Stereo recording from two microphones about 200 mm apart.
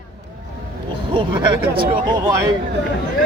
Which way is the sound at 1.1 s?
25° right (ahead or behind).